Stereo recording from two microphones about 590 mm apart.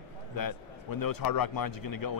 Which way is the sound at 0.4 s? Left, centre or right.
Left.